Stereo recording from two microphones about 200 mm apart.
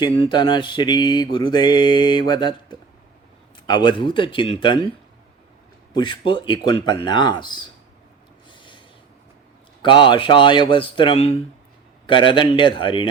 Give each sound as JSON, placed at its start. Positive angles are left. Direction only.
{"t": 0.3, "sound": "mantra", "side_deg": 20}
{"t": 5.9, "sound": "mantra", "side_deg": 25}
{"t": 8.4, "sound": "a sound", "side_deg": 25}
{"t": 9.8, "sound": "mantra", "side_deg": 25}